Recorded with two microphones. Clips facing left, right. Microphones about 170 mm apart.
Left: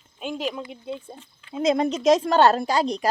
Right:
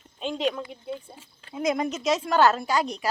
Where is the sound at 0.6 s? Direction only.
20° left (ahead or behind).